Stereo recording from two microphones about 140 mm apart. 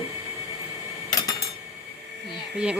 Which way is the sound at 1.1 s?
25° left (ahead or behind).